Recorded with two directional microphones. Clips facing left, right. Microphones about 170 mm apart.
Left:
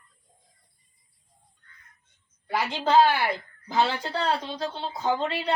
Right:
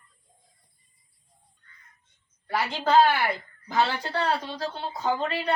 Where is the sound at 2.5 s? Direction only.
15° left (ahead or behind).